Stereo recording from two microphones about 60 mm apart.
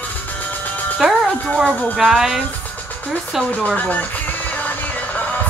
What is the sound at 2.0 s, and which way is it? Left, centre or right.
Speech, centre.